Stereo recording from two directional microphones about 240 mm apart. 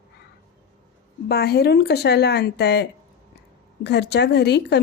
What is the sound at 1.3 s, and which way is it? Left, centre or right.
A woman's voice, left.